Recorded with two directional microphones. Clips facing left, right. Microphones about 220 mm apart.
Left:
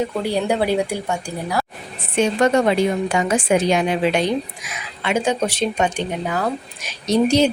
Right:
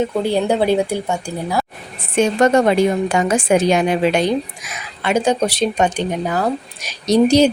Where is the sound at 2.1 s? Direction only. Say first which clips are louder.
Right 3 dB; 45° right (ahead or behind).